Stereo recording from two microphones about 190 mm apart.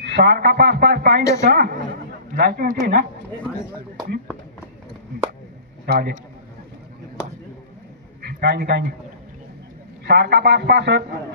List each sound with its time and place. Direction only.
0.0 s a man's voice: 60° right (ahead or behind)
5.9 s a man's voice: 60° right (ahead or behind)
8.2 s a man's voice: 60° right (ahead or behind)
10.0 s a man's voice: 60° right (ahead or behind)